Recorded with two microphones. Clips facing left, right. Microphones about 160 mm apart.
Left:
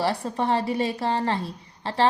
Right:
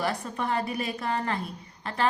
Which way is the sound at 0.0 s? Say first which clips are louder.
Left 5 dB; 30° left (ahead or behind).